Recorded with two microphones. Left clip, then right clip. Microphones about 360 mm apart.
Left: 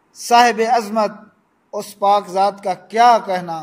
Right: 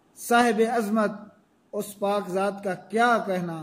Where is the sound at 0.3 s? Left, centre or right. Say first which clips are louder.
Left 9 dB; left.